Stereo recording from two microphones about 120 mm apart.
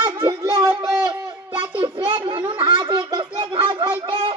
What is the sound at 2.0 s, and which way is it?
Children playing, 45° right (ahead or behind).